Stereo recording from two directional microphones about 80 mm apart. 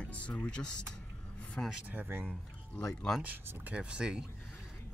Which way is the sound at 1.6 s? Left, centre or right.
Left.